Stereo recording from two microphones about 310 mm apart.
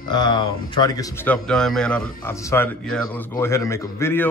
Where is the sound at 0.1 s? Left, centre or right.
Centre.